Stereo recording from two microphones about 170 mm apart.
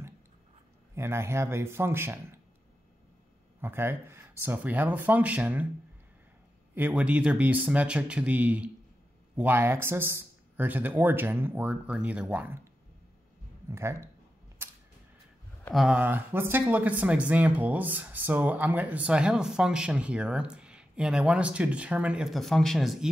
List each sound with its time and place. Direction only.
0.9 s speech: 15° right (ahead or behind)
3.6 s speech: 15° right (ahead or behind)
6.7 s speech: 10° right (ahead or behind)
13.7 s speech: 15° right (ahead or behind)
15.7 s speech: 5° right (ahead or behind)